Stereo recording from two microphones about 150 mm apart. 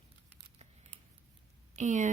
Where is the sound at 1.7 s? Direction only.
55° right (ahead or behind).